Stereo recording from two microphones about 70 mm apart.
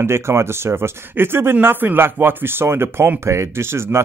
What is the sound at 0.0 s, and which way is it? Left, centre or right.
Speech, right.